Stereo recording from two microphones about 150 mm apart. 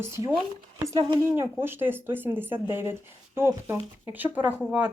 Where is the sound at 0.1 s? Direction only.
20° right (ahead or behind).